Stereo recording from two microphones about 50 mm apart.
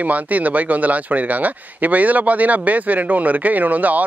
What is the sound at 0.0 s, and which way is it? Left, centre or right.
Speech, right.